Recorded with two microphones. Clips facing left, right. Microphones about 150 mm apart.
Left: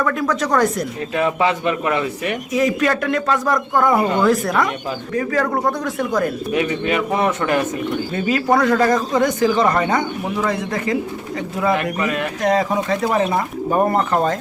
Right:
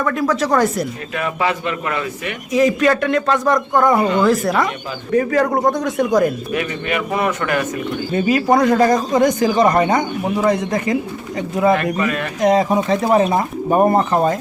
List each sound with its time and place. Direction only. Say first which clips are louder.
0.0 s speech: right 2 dB; centre (ahead or behind)
1.1 s a man's voice: left 3 dB; 20° left (ahead or behind)
2.5 s speech: right 4 dB; centre (ahead or behind)
5.1 s speech: right 5 dB; 25° right (ahead or behind)
6.5 s a man's voice: left 2 dB; 25° left (ahead or behind)
8.1 s a man's voice: right 3 dB; 15° right (ahead or behind)
11.9 s speech: right 1 dB; 20° left (ahead or behind)
12.4 s speech: right 4 dB; 20° right (ahead or behind)